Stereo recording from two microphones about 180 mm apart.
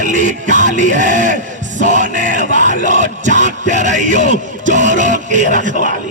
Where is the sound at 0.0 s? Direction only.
45° right (ahead or behind).